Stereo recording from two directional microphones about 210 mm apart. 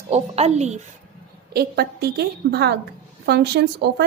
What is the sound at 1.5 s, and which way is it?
A woman's voice, 50° right (ahead or behind).